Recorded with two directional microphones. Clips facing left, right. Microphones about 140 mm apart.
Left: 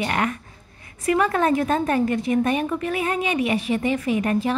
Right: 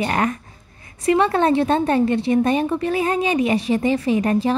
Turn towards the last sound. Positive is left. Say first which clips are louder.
# right 3 dB
turn(degrees=-35)  # may be behind; listen again after turning